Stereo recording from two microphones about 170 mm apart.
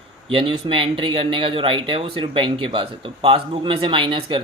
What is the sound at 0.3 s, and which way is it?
Speech, 30° right (ahead or behind).